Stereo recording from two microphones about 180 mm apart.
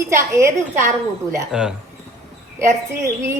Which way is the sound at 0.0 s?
15° right (ahead or behind).